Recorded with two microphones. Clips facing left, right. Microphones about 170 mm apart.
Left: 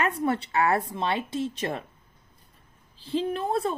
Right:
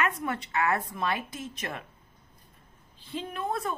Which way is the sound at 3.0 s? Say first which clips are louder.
Left 7 dB; 35° left (ahead or behind).